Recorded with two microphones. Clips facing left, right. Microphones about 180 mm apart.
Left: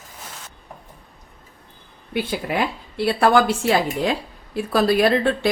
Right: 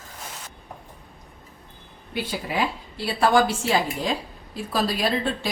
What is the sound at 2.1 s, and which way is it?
Speech, 60° left (ahead or behind).